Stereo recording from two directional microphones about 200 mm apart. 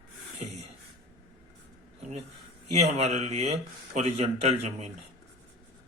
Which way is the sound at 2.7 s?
35° right (ahead or behind).